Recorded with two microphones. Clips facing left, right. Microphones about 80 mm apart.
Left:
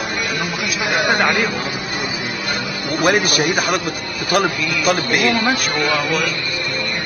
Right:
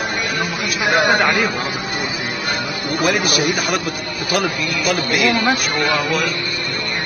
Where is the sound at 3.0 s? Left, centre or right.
Left.